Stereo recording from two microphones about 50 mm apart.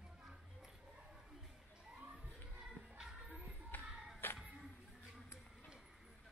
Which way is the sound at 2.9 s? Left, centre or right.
Centre.